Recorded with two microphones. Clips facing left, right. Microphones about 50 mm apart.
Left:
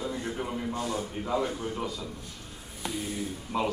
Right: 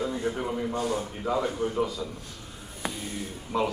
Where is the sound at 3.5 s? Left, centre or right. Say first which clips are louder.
Right 2 dB; centre.